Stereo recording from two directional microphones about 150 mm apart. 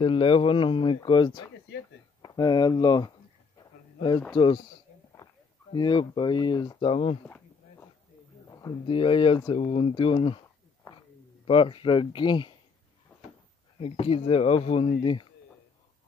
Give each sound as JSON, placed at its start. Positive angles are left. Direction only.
{"t": 0.0, "sound": "speech", "side_deg": 35}
{"t": 3.5, "sound": "a sound", "side_deg": 30}
{"t": 4.3, "sound": "speech", "side_deg": 30}
{"t": 8.5, "sound": "a sound", "side_deg": 25}
{"t": 8.8, "sound": "speech", "side_deg": 35}
{"t": 11.4, "sound": "speech", "side_deg": 35}
{"t": 13.1, "sound": "cupboard open or close", "side_deg": 10}
{"t": 13.7, "sound": "speech", "side_deg": 40}